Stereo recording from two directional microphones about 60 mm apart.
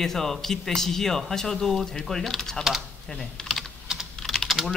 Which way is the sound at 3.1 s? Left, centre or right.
Centre.